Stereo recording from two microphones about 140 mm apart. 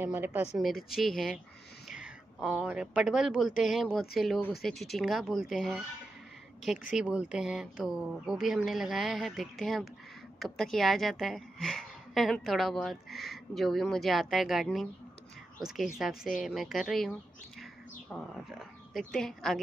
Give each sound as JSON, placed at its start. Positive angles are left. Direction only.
{"t": 0.0, "sound": "a woman's voice", "side_deg": -15}
{"t": 0.8, "sound": "a woman's voice", "side_deg": 0}
{"t": 1.9, "sound": "a sound", "side_deg": -5}
{"t": 2.6, "sound": "a woman's voice", "side_deg": -10}